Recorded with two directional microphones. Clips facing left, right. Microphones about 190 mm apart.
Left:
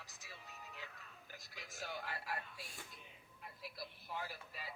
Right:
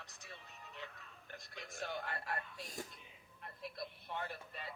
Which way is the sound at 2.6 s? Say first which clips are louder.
Right 8 dB; 40° right (ahead or behind).